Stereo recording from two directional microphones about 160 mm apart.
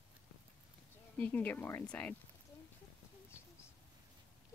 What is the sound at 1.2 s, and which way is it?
Speech, 10° left (ahead or behind).